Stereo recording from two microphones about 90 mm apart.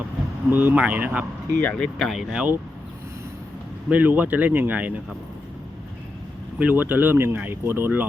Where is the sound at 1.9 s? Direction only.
Centre (ahead or behind).